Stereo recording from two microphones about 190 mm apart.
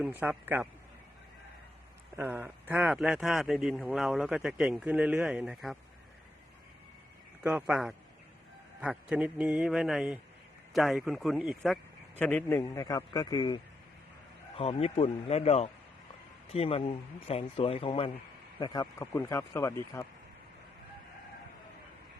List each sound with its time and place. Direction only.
0.0 s a man's voice: 10° right (ahead or behind)
2.1 s speech: 10° right (ahead or behind)
7.4 s speech: 5° right (ahead or behind); by 20.1 s 15° left (ahead or behind)